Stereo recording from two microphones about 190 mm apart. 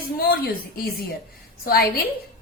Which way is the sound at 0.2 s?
55° left (ahead or behind).